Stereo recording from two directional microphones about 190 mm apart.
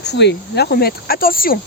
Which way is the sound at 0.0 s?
60° left (ahead or behind).